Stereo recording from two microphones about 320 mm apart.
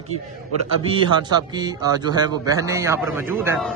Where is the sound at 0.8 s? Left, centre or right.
Centre.